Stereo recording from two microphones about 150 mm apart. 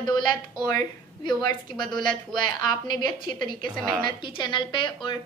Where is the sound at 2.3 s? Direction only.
30° left (ahead or behind).